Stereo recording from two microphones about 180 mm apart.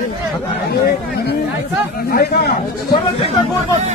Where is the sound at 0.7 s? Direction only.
65° left (ahead or behind).